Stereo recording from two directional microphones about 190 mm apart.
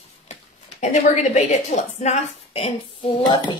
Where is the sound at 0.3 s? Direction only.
35° left (ahead or behind).